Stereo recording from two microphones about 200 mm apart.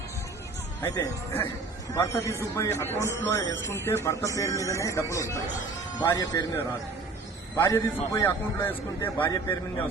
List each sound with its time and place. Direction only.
0.8 s a man's voice: 15° left (ahead or behind)
7.5 s a man's voice: 15° left (ahead or behind)